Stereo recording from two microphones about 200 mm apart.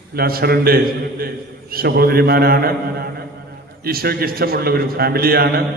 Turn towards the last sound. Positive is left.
turn(degrees=-50)  # may be behind; listen again after turning